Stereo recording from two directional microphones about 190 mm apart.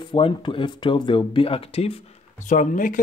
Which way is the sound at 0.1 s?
25° left (ahead or behind).